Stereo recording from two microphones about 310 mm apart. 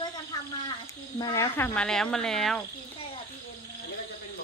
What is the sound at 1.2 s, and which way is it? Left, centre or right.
Speech, centre.